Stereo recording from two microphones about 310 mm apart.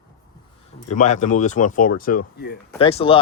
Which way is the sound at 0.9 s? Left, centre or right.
Left.